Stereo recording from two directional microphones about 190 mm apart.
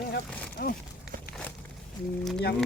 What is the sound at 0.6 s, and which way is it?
Speech, 55° left (ahead or behind).